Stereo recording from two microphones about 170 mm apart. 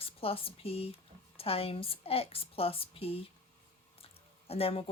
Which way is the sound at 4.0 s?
35° left (ahead or behind).